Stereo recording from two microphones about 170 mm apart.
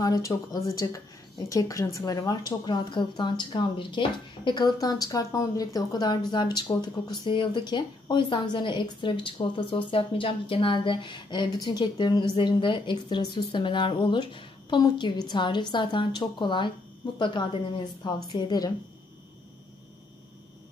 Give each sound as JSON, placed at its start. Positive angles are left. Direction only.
{"t": 0.0, "sound": "a woman's voice", "side_deg": 20}